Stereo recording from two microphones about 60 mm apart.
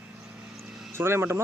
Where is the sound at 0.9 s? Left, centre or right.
Right.